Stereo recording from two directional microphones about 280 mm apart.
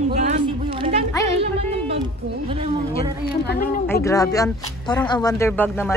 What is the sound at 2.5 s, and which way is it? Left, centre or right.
Speech, centre.